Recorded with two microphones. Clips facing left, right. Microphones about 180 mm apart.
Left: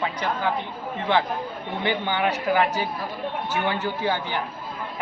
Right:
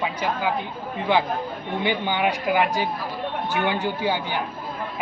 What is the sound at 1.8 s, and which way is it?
Speech, 15° right (ahead or behind).